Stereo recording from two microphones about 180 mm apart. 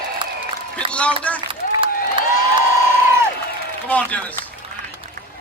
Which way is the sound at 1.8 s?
25° right (ahead or behind).